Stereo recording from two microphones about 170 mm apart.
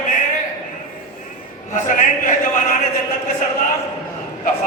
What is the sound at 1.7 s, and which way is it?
A man's voice, 50° left (ahead or behind).